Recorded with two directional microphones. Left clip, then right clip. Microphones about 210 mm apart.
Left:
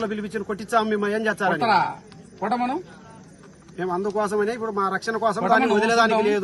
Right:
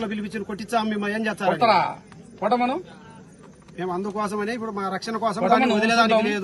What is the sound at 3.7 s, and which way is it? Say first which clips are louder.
Speech: left 3 dB; 15° left (ahead or behind).